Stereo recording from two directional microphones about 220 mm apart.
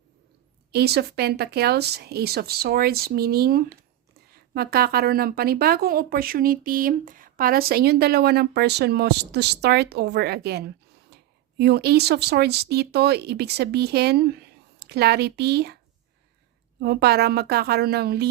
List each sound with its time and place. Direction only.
0.7 s speech: 45° right (ahead or behind)
16.8 s speech: 45° right (ahead or behind)